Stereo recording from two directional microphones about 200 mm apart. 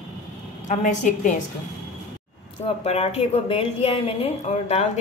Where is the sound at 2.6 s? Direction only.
30° left (ahead or behind).